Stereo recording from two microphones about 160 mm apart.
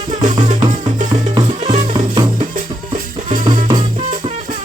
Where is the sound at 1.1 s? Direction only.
35° right (ahead or behind).